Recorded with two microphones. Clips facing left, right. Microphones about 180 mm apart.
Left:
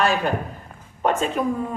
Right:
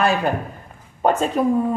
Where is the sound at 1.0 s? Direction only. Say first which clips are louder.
Right 3 dB; 35° right (ahead or behind).